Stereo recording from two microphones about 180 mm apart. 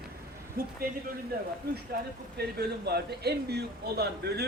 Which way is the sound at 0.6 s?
55° right (ahead or behind).